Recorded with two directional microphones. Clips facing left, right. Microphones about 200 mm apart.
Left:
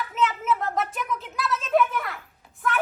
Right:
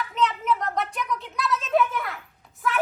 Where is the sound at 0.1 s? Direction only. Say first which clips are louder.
Even; 5° left (ahead or behind).